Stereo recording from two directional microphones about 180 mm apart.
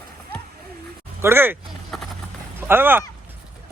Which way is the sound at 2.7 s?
10° right (ahead or behind).